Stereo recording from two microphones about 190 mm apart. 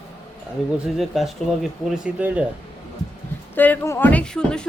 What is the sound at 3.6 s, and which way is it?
Speech, 10° left (ahead or behind).